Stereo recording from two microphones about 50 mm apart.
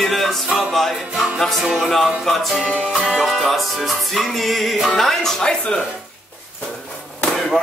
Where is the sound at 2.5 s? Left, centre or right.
Centre.